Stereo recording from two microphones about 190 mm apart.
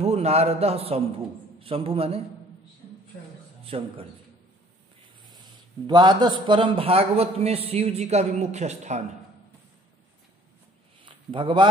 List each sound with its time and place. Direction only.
0.0 s a man's voice: 35° right (ahead or behind)
3.6 s a man's voice: 30° right (ahead or behind)
5.3 s a man's voice: 20° right (ahead or behind)
11.1 s a sound: 25° right (ahead or behind)